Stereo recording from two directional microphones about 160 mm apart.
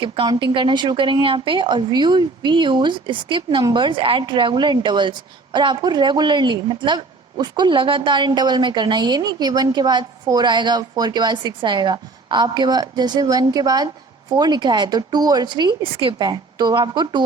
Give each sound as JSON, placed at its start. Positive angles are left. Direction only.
{"t": 0.0, "sound": "a woman's voice", "side_deg": -30}